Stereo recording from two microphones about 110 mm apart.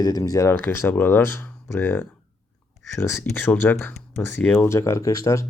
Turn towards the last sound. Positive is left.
turn(degrees=30)  # may be behind; listen again after turning